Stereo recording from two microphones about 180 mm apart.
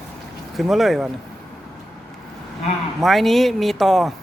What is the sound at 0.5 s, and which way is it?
Speech, centre (ahead or behind).